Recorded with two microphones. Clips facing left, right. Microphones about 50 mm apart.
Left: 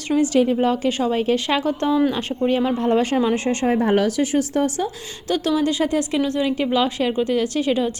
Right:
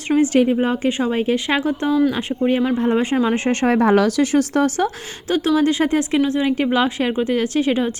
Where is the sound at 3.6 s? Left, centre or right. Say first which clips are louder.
Right 3 dB; right.